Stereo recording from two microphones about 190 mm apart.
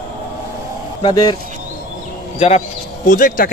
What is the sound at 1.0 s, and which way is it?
Speech, 25° left (ahead or behind).